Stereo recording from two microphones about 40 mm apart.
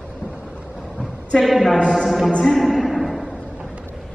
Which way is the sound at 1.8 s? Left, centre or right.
Centre.